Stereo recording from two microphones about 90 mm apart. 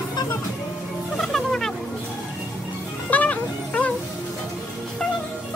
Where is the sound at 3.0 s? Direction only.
15° left (ahead or behind).